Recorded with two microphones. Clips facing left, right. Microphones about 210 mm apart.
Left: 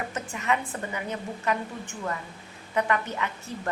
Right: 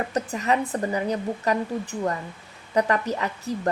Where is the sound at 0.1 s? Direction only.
35° right (ahead or behind).